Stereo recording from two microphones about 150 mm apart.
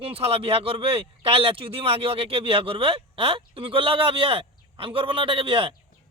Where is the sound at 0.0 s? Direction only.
40° right (ahead or behind).